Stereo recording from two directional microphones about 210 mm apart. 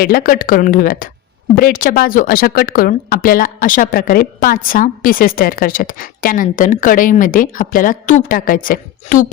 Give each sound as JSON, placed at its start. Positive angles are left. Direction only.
{"t": 0.0, "sound": "speech", "side_deg": 45}